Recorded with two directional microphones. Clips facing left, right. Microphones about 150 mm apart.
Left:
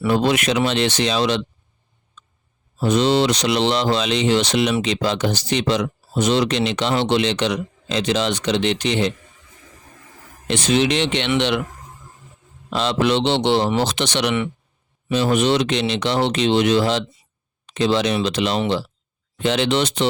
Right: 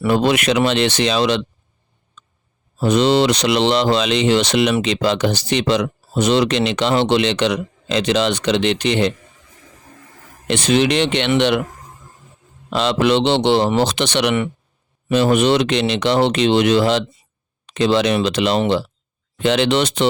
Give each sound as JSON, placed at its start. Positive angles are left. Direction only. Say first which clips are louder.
{"t": 0.0, "sound": "speech", "louder": "right 2 dB", "side_deg": -75}
{"t": 2.8, "sound": "speech", "louder": "right 2 dB", "side_deg": -70}
{"t": 10.5, "sound": "speech", "louder": "right 2 dB", "side_deg": -60}
{"t": 12.7, "sound": "speech", "louder": "right 3 dB", "side_deg": -70}
{"t": 19.4, "sound": "speech", "louder": "right 3 dB", "side_deg": -70}